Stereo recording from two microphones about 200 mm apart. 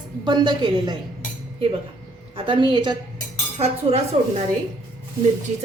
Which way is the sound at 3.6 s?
30° right (ahead or behind).